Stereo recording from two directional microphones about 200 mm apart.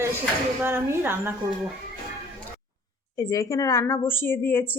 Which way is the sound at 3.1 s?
15° left (ahead or behind).